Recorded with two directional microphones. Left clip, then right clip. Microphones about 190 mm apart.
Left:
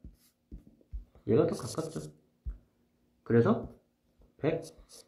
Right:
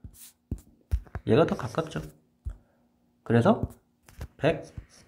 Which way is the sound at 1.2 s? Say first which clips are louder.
Right 4 dB; 55° right (ahead or behind).